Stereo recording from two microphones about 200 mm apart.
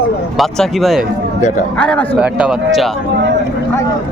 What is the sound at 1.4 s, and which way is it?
Speech, 40° left (ahead or behind).